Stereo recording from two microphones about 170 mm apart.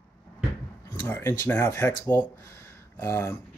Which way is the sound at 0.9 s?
15° left (ahead or behind).